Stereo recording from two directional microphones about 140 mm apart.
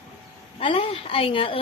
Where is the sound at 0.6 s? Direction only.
40° left (ahead or behind).